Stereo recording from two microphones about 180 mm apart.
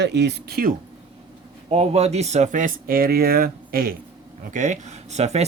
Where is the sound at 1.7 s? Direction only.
35° right (ahead or behind); by 3.9 s 55° right (ahead or behind).